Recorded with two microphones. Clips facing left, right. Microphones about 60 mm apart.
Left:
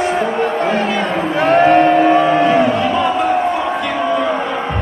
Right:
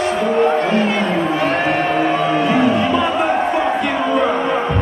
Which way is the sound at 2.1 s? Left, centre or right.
Centre.